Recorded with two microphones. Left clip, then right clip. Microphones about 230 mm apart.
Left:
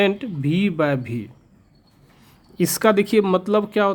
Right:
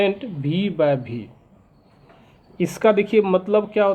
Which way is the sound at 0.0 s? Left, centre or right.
Left.